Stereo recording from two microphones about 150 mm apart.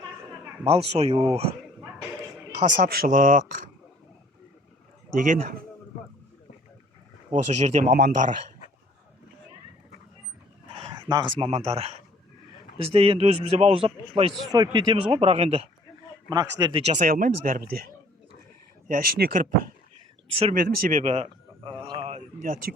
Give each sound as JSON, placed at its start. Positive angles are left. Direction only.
{"t": 0.6, "sound": "a man's voice", "side_deg": -40}
{"t": 2.6, "sound": "speech", "side_deg": -65}
{"t": 5.1, "sound": "speech", "side_deg": -65}
{"t": 7.3, "sound": "speech", "side_deg": -50}
{"t": 10.8, "sound": "a man's voice", "side_deg": -30}
{"t": 14.5, "sound": "a man's voice", "side_deg": -25}
{"t": 16.3, "sound": "speech", "side_deg": -30}
{"t": 16.8, "sound": "speech", "side_deg": -50}
{"t": 17.1, "sound": "speech", "side_deg": -65}
{"t": 20.2, "sound": "speech", "side_deg": -35}
{"t": 20.5, "sound": "speech", "side_deg": -75}
{"t": 21.0, "sound": "a sound", "side_deg": -45}
{"t": 22.4, "sound": "speech", "side_deg": -65}